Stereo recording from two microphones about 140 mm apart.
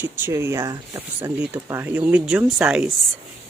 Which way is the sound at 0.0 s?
15° right (ahead or behind).